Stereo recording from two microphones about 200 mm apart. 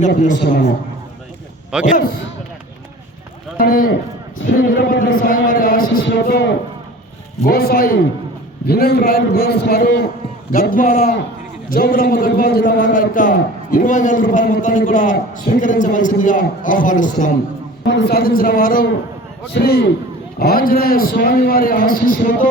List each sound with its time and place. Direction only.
0.2 s a man's voice: 40° left (ahead or behind)
1.8 s a man's voice: 45° left (ahead or behind)
3.6 s a man's voice: 45° left (ahead or behind)
4.8 s a sound: 45° left (ahead or behind)
7.4 s a man's voice: 50° left (ahead or behind)
17.8 s a man's voice: 60° left (ahead or behind)